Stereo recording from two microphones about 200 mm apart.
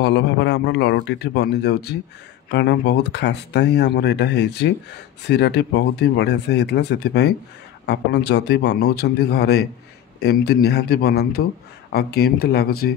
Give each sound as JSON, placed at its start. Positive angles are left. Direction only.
{"t": 0.0, "sound": "speech", "side_deg": 60}